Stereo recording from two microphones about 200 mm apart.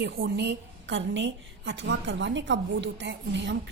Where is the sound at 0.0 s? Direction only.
60° right (ahead or behind).